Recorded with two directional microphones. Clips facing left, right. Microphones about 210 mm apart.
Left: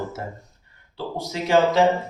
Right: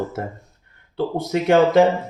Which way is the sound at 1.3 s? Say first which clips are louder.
Right 4 dB; 60° right (ahead or behind).